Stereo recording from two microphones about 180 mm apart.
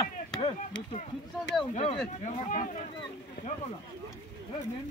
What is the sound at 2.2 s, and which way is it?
Speech, 45° left (ahead or behind).